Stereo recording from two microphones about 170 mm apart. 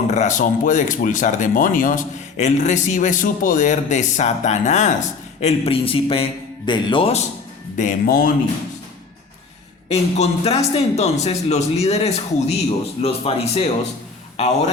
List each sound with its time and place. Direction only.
0.1 s speech: 45° left (ahead or behind)
7.8 s speech: 55° left (ahead or behind)
9.9 s a man's voice: 35° left (ahead or behind)